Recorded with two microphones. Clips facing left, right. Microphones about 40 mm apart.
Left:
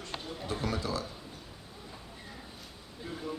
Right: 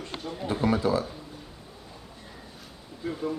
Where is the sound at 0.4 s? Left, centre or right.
Right.